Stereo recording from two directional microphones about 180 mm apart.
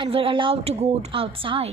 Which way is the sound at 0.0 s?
30° right (ahead or behind).